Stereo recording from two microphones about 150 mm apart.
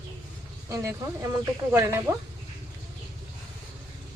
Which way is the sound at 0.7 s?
20° right (ahead or behind).